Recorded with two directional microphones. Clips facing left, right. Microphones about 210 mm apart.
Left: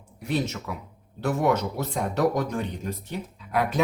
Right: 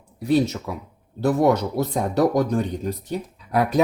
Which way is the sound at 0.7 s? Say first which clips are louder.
Right 4 dB; 35° right (ahead or behind).